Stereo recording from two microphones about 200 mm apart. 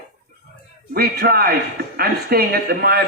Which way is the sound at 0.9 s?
50° right (ahead or behind).